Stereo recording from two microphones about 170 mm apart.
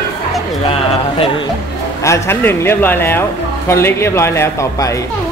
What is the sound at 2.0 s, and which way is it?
A child's voice, 15° left (ahead or behind).